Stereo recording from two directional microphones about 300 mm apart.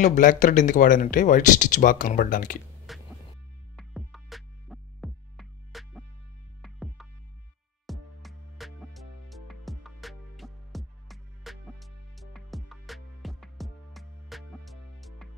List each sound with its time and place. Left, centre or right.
0.0 s speech: left
2.9 s music: centre